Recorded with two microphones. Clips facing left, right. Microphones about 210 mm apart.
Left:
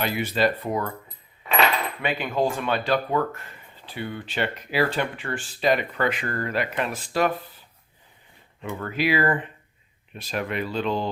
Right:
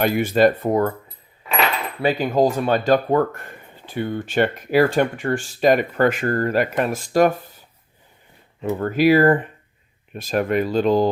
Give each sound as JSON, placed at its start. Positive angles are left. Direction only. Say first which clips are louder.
{"t": 0.0, "sound": "speech", "louder": "right 7 dB", "side_deg": -50}
{"t": 2.0, "sound": "speech", "louder": "right 9 dB", "side_deg": -40}
{"t": 8.8, "sound": "speech", "louder": "right 9 dB", "side_deg": -40}